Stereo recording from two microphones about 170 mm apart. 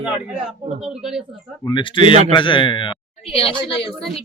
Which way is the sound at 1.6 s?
25° left (ahead or behind).